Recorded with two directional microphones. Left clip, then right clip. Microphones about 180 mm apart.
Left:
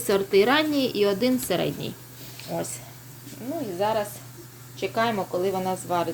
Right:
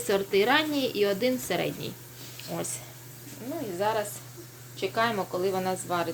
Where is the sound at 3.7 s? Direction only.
10° left (ahead or behind).